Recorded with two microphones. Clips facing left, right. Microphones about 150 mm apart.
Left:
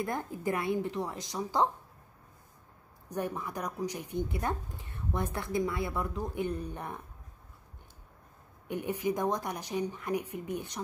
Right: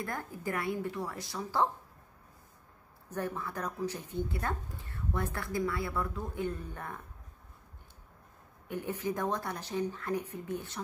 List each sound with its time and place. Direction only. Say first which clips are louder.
0.0 s speech: left 4 dB; 20° left (ahead or behind)
3.1 s speech: left 1 dB; 15° left (ahead or behind)
8.6 s speech: left 3 dB; 20° left (ahead or behind)